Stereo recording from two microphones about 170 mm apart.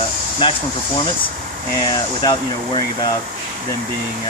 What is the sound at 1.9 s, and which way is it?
Speech, 25° left (ahead or behind).